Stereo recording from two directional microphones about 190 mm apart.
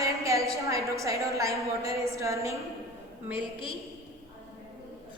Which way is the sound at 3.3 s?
25° left (ahead or behind).